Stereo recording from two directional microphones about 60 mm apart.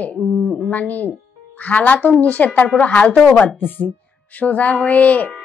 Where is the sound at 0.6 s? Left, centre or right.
Left.